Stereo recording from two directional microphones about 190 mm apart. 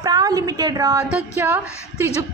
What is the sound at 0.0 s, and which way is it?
A woman's voice, 20° right (ahead or behind).